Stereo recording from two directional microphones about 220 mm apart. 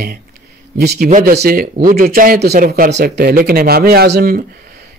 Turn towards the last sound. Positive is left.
turn(degrees=-45)  # may be behind; listen again after turning